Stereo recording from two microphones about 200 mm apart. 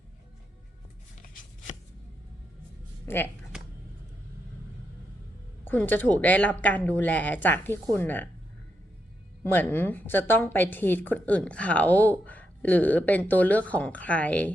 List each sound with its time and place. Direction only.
1.2 s a sound: 40° left (ahead or behind)
3.1 s a woman's voice: 10° left (ahead or behind)
5.6 s a woman's voice: 10° left (ahead or behind)
9.4 s a woman's voice: 10° left (ahead or behind)